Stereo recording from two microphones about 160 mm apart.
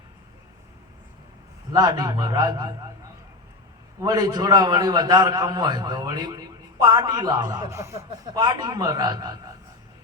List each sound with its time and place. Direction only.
1.7 s a man's voice: 25° right (ahead or behind)
4.0 s a man's voice: 25° right (ahead or behind)